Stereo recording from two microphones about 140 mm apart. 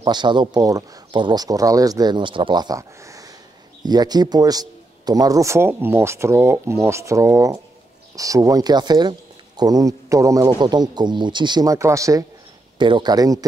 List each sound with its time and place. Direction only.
0.0 s a man's voice: 30° right (ahead or behind)
12.7 s a man's voice: 35° right (ahead or behind)